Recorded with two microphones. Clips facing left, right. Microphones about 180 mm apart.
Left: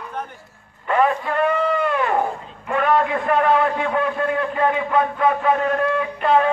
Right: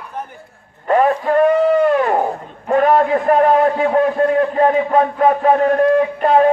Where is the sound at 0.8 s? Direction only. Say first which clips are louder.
Right 5 dB; 40° right (ahead or behind).